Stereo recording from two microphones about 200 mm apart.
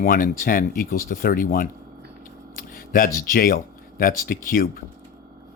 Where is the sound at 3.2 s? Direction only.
45° left (ahead or behind).